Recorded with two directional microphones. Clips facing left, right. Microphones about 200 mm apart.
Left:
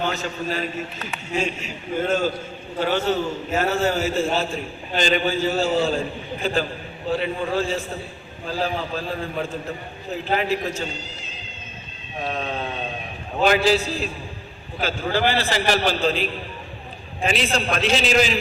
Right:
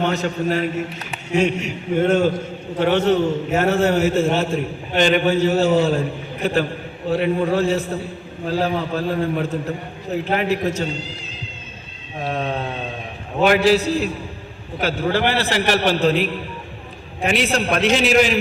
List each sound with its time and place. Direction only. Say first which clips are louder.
0.0 s a man's voice: right 5 dB; 65° right (ahead or behind)
12.3 s a sound: right 5 dB; 60° right (ahead or behind)
13.4 s a man's voice: right 3 dB; 65° right (ahead or behind)